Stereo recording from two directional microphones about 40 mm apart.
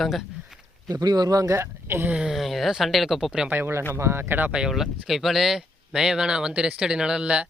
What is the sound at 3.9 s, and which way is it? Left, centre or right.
Speech, right.